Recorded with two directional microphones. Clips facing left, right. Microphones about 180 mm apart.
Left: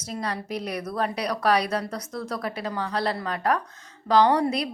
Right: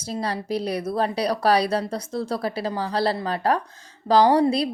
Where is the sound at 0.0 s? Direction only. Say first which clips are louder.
Right 3 dB; 30° right (ahead or behind).